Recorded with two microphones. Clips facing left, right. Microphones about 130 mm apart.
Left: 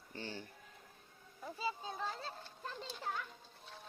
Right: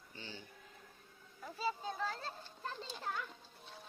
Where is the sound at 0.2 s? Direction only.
50° left (ahead or behind).